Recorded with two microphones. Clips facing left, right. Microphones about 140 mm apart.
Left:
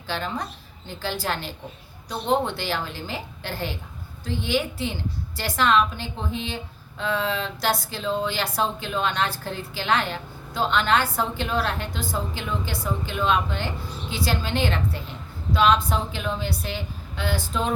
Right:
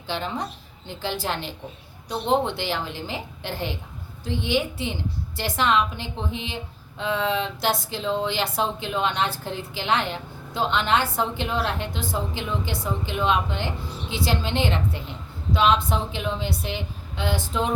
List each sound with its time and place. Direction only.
0.1 s speech: 20° right (ahead or behind)